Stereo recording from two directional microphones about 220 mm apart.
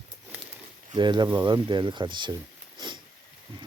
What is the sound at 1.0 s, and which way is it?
Speech, 20° right (ahead or behind).